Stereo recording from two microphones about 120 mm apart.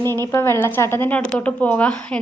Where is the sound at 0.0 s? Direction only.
20° left (ahead or behind).